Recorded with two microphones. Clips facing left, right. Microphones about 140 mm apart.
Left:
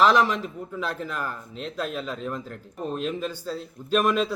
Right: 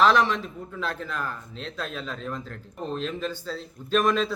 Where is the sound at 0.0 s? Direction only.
10° left (ahead or behind).